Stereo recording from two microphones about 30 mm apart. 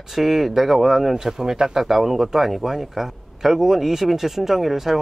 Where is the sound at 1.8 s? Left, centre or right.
Centre.